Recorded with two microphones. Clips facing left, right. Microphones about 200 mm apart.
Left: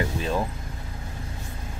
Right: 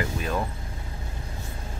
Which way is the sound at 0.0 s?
25° left (ahead or behind).